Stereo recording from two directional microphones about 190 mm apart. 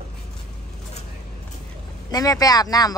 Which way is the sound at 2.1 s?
20° left (ahead or behind).